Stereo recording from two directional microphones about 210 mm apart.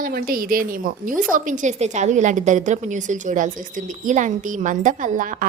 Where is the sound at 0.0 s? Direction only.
45° right (ahead or behind).